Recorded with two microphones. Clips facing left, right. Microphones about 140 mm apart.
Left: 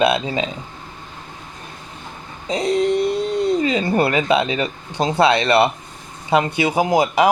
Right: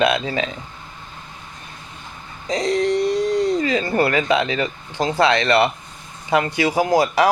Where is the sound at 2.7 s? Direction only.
15° left (ahead or behind).